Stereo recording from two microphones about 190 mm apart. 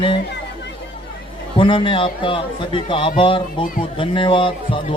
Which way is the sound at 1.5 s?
25° left (ahead or behind).